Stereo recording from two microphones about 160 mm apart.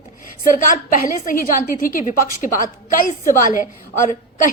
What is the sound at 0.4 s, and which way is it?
A woman's voice, 60° left (ahead or behind).